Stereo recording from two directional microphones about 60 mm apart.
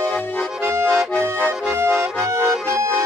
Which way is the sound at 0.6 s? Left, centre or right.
Right.